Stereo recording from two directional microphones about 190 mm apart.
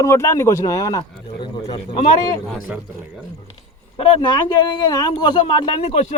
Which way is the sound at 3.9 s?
25° left (ahead or behind).